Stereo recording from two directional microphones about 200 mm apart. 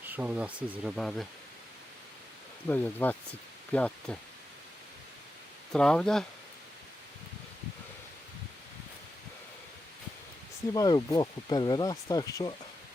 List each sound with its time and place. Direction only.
0.1 s speech: 5° right (ahead or behind)
2.6 s speech: 10° left (ahead or behind)
5.7 s speech: 5° left (ahead or behind)
10.8 s speech: 20° left (ahead or behind)